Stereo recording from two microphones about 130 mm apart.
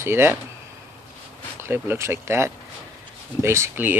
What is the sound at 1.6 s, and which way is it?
Speech, 20° right (ahead or behind).